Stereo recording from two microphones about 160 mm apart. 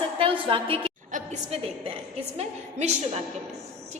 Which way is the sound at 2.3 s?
40° right (ahead or behind).